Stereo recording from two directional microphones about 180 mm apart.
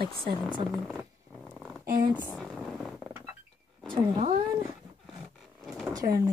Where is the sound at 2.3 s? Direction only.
Centre (ahead or behind).